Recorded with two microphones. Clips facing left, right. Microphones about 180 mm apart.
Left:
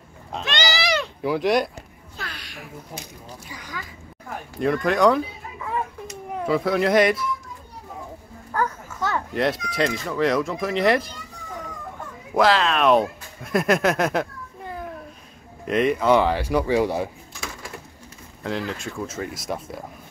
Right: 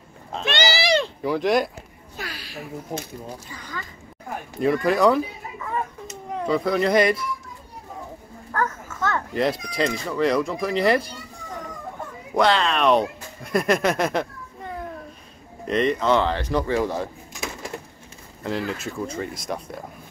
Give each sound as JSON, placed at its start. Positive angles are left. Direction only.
{"t": 0.7, "sound": "a sound", "side_deg": -30}
{"t": 1.2, "sound": "speech", "side_deg": 0}
{"t": 2.1, "sound": "a sound", "side_deg": -5}
{"t": 3.4, "sound": "speech", "side_deg": 15}
{"t": 4.6, "sound": "speech", "side_deg": 0}
{"t": 8.5, "sound": "a child's voice", "side_deg": 10}
{"t": 9.3, "sound": "speech", "side_deg": 0}
{"t": 12.4, "sound": "speech", "side_deg": 0}
{"t": 15.6, "sound": "speech", "side_deg": 5}
{"t": 18.4, "sound": "speech", "side_deg": 0}